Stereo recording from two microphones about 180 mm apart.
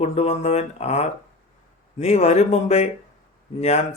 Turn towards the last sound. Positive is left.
turn(degrees=40)  # may be behind; listen again after turning